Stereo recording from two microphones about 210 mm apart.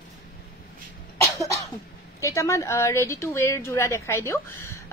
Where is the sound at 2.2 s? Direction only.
15° left (ahead or behind).